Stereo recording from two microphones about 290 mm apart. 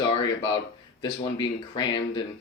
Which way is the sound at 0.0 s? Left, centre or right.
Centre.